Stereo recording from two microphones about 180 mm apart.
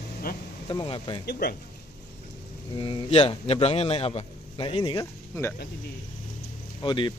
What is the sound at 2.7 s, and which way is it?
A man's voice, 30° left (ahead or behind).